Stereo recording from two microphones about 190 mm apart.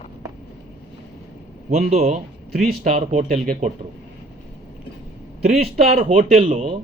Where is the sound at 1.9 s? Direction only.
35° right (ahead or behind).